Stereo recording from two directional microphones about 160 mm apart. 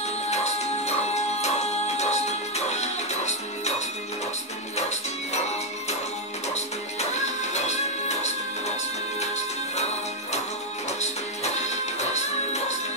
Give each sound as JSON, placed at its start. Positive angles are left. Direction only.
{"t": 0.3, "sound": "music", "side_deg": 45}
{"t": 4.7, "sound": "music", "side_deg": 45}
{"t": 6.5, "sound": "music", "side_deg": 45}
{"t": 10.9, "sound": "music", "side_deg": 45}